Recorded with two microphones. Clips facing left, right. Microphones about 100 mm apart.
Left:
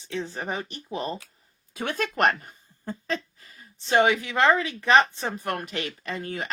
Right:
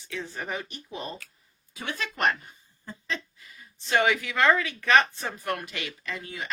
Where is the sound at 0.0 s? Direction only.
25° left (ahead or behind).